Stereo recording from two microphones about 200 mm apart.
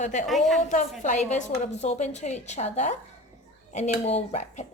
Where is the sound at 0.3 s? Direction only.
Centre (ahead or behind).